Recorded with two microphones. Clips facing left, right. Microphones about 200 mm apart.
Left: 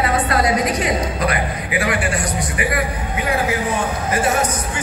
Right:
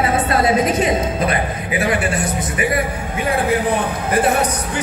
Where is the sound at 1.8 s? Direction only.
25° right (ahead or behind).